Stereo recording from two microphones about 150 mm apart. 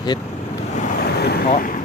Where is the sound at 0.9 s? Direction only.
85° left; by 1.8 s 60° left (ahead or behind).